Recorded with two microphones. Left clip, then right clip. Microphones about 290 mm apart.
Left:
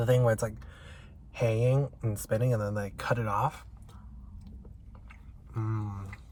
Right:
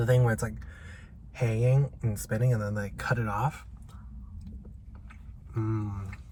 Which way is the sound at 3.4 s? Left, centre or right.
Centre.